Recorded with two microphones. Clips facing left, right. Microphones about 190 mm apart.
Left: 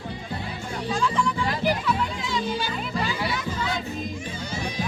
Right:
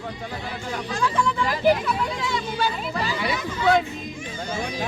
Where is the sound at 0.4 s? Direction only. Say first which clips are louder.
Even; 80° right.